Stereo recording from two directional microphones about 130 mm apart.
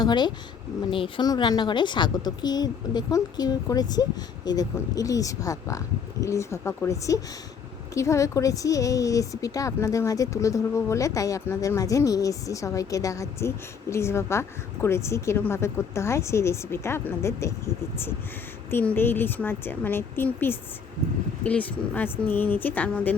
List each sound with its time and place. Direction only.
0.0 s a woman's voice: 35° left (ahead or behind)
18.7 s a woman's voice: 15° left (ahead or behind)